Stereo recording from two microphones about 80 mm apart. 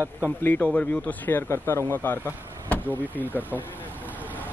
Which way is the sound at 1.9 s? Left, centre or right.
Left.